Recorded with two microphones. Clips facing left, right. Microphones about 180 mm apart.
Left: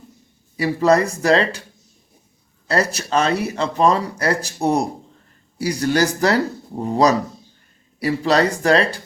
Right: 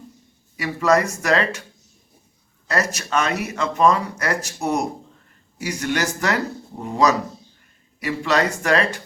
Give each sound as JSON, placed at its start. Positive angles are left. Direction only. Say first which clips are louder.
{"t": 0.5, "sound": "speech", "louder": "left 3 dB", "side_deg": 30}
{"t": 2.6, "sound": "speech", "louder": "left 3 dB", "side_deg": 30}